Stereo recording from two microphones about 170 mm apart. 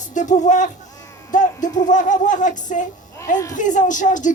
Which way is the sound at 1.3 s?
50° left (ahead or behind).